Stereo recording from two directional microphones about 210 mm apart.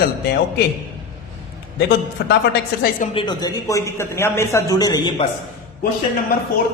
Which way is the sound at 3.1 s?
20° left (ahead or behind).